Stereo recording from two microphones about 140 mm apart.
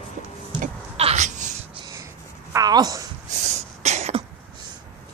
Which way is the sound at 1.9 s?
20° right (ahead or behind).